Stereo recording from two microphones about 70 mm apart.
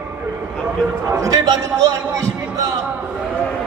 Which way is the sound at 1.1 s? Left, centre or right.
Right.